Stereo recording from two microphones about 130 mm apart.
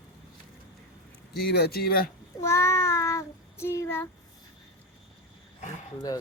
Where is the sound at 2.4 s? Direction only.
20° left (ahead or behind).